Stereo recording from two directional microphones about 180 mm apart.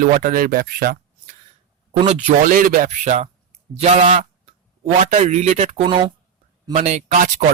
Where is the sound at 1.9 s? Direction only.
40° right (ahead or behind).